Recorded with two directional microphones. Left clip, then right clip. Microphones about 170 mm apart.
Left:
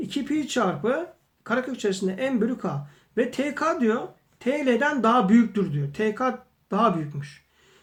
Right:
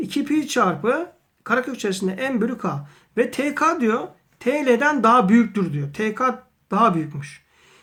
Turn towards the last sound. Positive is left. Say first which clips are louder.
# right 4 dB
turn(degrees=-35)  # may be behind; listen again after turning